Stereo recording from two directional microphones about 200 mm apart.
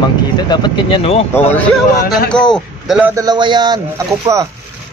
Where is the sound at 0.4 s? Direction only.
20° left (ahead or behind).